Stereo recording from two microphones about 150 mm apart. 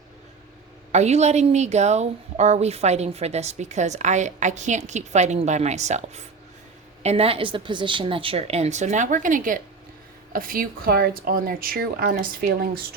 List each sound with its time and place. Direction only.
0.9 s a woman's voice: 50° right (ahead or behind); by 12.8 s 75° right (ahead or behind)